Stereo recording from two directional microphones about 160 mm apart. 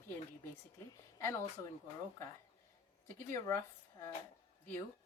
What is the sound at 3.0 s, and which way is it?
Speech, 15° left (ahead or behind).